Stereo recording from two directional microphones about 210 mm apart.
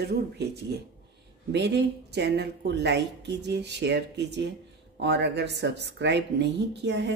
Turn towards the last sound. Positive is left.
turn(degrees=-55)  # may be behind; listen again after turning